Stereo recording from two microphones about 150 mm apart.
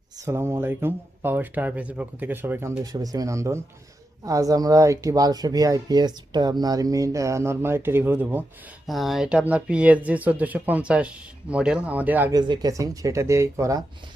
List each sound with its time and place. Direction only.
0.2 s speech: 15° right (ahead or behind)
8.9 s speech: centre (ahead or behind)
12.3 s speech: 25° right (ahead or behind)